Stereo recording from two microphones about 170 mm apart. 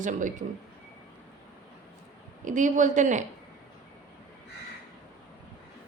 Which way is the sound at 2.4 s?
45° right (ahead or behind).